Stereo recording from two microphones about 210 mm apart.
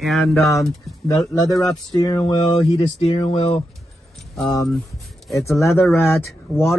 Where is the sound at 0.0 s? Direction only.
Centre (ahead or behind).